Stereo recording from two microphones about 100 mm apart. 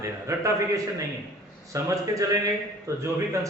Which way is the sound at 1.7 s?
35° right (ahead or behind).